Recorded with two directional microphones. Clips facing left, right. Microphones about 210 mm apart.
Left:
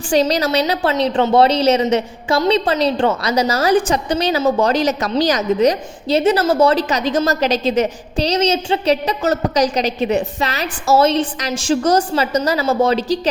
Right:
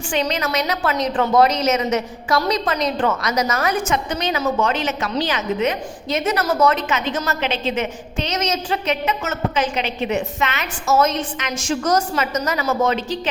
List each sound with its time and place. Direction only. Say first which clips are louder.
0.1 s a woman's voice: left 7 dB; 35° left (ahead or behind)